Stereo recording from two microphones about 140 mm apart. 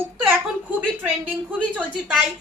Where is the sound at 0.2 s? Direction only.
10° right (ahead or behind).